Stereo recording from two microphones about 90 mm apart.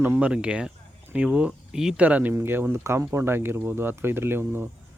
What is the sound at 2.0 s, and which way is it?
Speech, 20° right (ahead or behind).